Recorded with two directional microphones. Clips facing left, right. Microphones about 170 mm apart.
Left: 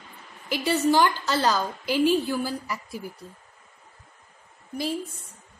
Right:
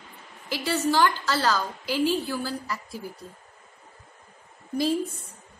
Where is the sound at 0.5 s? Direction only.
15° left (ahead or behind).